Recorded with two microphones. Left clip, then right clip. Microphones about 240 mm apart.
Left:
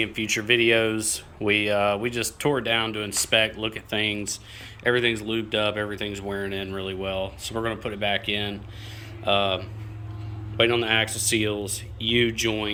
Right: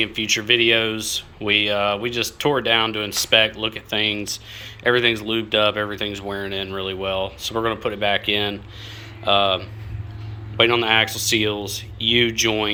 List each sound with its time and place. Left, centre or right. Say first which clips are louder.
0.0 s speech: right 5 dB; centre